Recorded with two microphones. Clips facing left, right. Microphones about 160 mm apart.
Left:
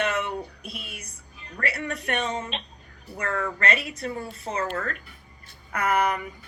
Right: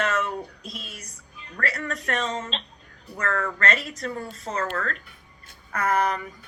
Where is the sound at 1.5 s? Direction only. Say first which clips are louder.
Even; 30° left (ahead or behind).